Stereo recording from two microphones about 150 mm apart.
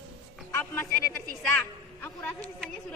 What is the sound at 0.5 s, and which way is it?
A woman's voice, 15° left (ahead or behind).